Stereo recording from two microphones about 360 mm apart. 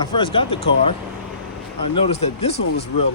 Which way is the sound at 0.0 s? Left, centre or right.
Centre.